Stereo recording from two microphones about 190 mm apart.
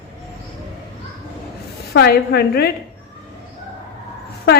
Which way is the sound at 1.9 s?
60° left (ahead or behind).